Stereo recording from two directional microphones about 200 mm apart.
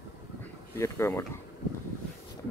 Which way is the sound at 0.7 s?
15° left (ahead or behind).